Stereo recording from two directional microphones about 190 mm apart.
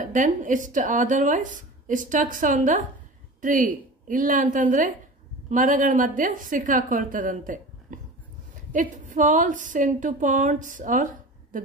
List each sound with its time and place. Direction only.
0.0 s a woman's voice: 40° right (ahead or behind)